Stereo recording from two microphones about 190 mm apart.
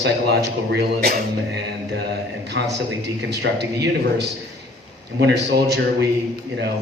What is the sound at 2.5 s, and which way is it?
A man's voice, 65° right (ahead or behind).